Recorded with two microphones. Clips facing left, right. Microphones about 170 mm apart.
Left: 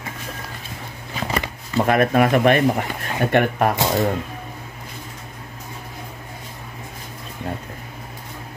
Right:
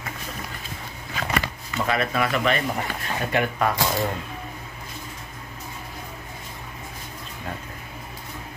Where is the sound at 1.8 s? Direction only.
50° left (ahead or behind).